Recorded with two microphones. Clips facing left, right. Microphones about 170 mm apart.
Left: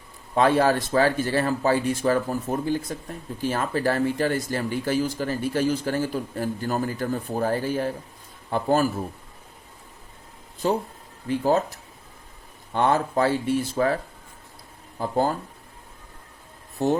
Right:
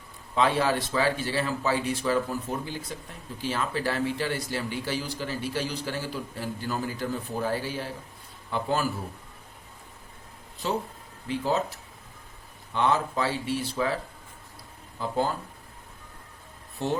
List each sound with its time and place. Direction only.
0.3 s speech: 45° left (ahead or behind)
11.3 s speech: 45° left (ahead or behind)
16.8 s speech: 45° left (ahead or behind)